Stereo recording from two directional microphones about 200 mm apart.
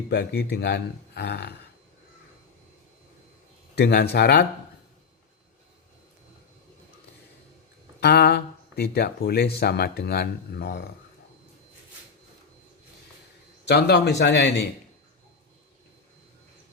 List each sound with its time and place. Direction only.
0.1 s a man's voice: 55° left (ahead or behind)
3.8 s speech: 55° left (ahead or behind)
8.0 s speech: 55° left (ahead or behind)
13.7 s a man's voice: 55° left (ahead or behind)